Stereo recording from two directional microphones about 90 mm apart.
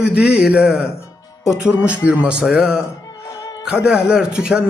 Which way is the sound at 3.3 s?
35° left (ahead or behind).